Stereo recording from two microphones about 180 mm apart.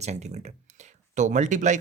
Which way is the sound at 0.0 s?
40° right (ahead or behind).